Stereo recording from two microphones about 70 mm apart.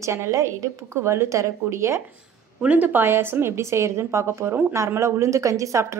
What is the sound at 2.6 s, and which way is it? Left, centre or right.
A woman's voice, right.